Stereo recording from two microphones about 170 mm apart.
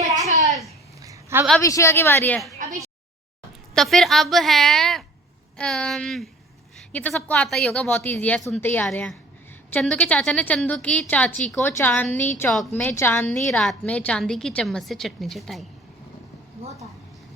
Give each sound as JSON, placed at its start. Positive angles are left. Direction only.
{"t": 1.0, "sound": "a sound", "side_deg": -15}
{"t": 1.6, "sound": "a woman's voice", "side_deg": 15}
{"t": 3.8, "sound": "a woman's voice", "side_deg": 0}